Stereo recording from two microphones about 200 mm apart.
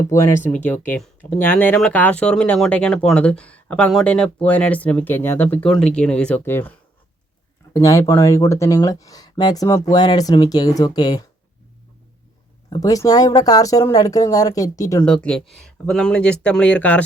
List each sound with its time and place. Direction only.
0.1 s speech: 15° left (ahead or behind)
12.7 s speech: 15° left (ahead or behind)
15.0 s speech: 5° left (ahead or behind)